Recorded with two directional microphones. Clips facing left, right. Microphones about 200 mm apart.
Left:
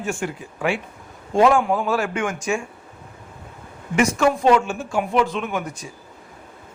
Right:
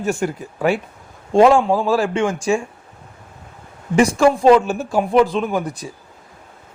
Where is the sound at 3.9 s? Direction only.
30° right (ahead or behind).